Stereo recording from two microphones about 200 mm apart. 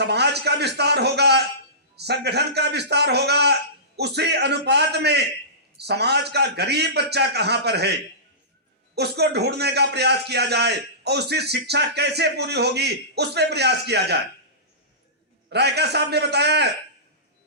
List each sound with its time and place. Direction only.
0.0 s a man's voice: 55° right (ahead or behind)
9.0 s a man's voice: 55° right (ahead or behind)
15.4 s a man's voice: 55° right (ahead or behind)